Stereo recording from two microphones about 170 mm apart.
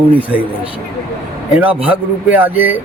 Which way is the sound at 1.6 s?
10° right (ahead or behind).